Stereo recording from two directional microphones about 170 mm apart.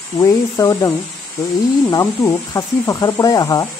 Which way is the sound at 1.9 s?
20° left (ahead or behind).